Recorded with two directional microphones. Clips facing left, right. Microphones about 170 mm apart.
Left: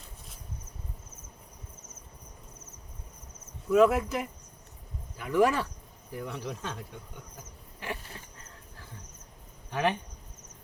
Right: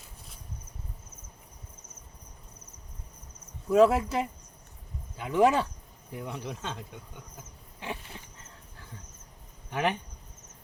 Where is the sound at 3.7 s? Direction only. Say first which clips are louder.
Right 1 dB; 30° right (ahead or behind).